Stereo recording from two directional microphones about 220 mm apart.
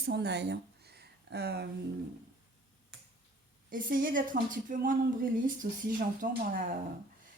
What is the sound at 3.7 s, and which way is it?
Speech, 40° right (ahead or behind).